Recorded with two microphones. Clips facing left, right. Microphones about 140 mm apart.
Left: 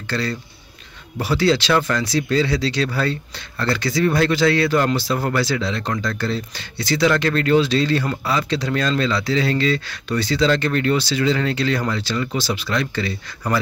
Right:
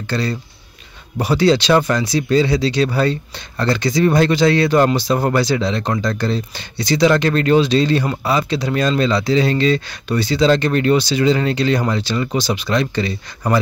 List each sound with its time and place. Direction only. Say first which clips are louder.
0.1 s speech: right 3 dB; 15° right (ahead or behind)